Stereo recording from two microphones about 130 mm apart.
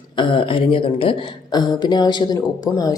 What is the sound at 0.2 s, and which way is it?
A woman's voice, 40° left (ahead or behind).